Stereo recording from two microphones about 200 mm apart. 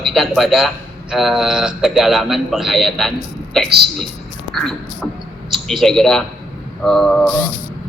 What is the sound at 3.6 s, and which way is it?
Speech, 55° right (ahead or behind).